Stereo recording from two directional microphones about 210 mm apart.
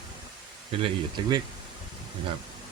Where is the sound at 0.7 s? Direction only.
25° right (ahead or behind).